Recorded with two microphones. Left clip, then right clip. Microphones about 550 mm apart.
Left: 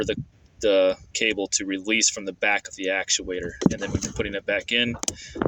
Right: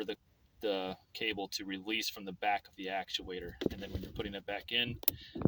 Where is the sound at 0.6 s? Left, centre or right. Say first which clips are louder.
Left 17 dB; right.